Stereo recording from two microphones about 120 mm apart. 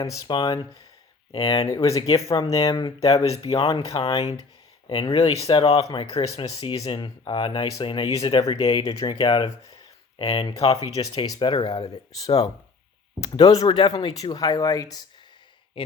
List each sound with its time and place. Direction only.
0.3 s speech: 40° left (ahead or behind)
3.0 s speech: 55° left (ahead or behind)
8.5 s speech: 35° left (ahead or behind)
10.3 s speech: 50° left (ahead or behind); by 15.0 s 30° left (ahead or behind)